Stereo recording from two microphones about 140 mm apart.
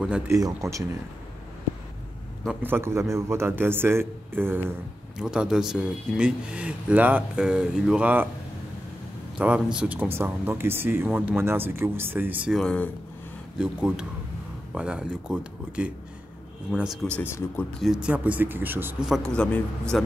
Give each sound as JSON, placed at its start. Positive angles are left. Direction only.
{"t": 0.3, "sound": "speech", "side_deg": -25}
{"t": 2.6, "sound": "speech", "side_deg": -15}
{"t": 9.4, "sound": "speech", "side_deg": -10}
{"t": 12.4, "sound": "speech", "side_deg": 5}
{"t": 13.6, "sound": "speech", "side_deg": -5}
{"t": 17.1, "sound": "a man's voice", "side_deg": 15}
{"t": 17.7, "sound": "speech", "side_deg": -5}
{"t": 19.0, "sound": "a man's voice", "side_deg": 0}